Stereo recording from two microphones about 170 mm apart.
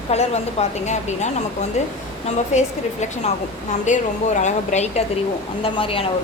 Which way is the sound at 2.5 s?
45° left (ahead or behind).